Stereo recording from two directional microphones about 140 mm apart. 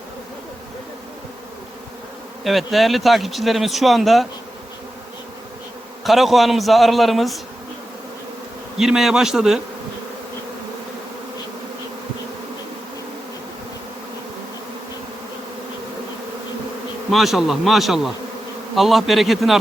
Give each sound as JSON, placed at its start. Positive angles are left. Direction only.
{"t": 2.4, "sound": "speech", "side_deg": 0}
{"t": 6.1, "sound": "speech", "side_deg": 0}
{"t": 8.8, "sound": "speech", "side_deg": 0}
{"t": 17.1, "sound": "speech", "side_deg": 0}